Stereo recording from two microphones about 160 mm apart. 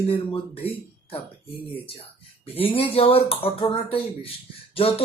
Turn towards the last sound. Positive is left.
turn(degrees=35)  # may be behind; listen again after turning